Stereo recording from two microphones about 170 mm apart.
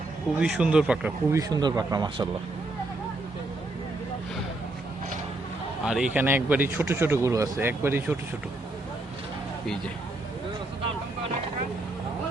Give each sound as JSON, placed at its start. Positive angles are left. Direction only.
{"t": 0.3, "sound": "speech", "side_deg": -5}
{"t": 1.3, "sound": "speech", "side_deg": -20}
{"t": 5.8, "sound": "speech", "side_deg": -5}